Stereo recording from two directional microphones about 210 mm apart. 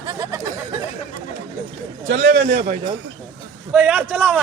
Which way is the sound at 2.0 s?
60° right (ahead or behind).